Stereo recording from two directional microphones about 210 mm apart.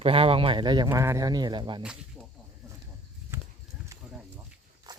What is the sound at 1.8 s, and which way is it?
Speech, 5° right (ahead or behind).